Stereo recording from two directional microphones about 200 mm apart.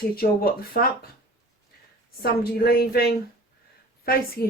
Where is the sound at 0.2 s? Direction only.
50° left (ahead or behind).